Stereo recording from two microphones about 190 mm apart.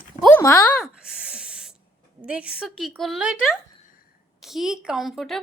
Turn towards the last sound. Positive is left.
turn(degrees=0)  # may be behind; listen again after turning